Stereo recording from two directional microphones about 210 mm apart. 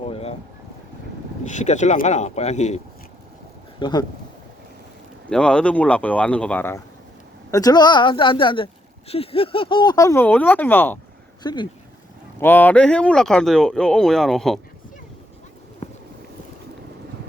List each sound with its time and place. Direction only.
0.1 s a sound: 30° left (ahead or behind)
1.5 s speech: 35° left (ahead or behind)
3.8 s speech: 20° left (ahead or behind)
5.3 s speech: 5° left (ahead or behind)
11.4 s speech: 20° left (ahead or behind)
12.4 s speech: 10° left (ahead or behind)
15.8 s a sound: 30° left (ahead or behind)